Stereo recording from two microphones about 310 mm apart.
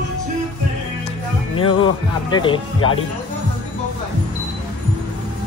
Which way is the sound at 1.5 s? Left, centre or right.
Centre.